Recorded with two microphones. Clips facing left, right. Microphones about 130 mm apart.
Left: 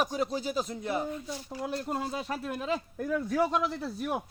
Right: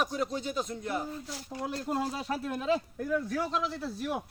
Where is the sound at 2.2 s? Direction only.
30° left (ahead or behind).